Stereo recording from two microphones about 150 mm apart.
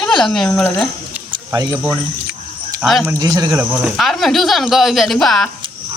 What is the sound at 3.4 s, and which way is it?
Speech, 25° right (ahead or behind).